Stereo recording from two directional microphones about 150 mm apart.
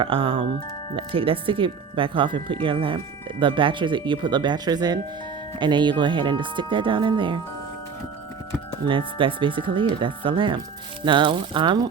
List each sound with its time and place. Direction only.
0.0 s speech: 35° right (ahead or behind)
8.9 s speech: 35° right (ahead or behind)